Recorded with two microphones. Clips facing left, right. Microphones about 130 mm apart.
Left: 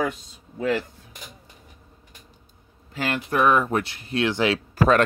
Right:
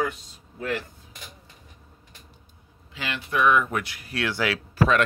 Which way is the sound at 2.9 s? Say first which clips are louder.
Left 4 dB; 45° left (ahead or behind).